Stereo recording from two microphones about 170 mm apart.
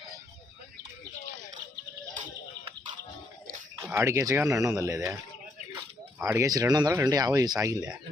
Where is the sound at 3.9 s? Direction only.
15° right (ahead or behind).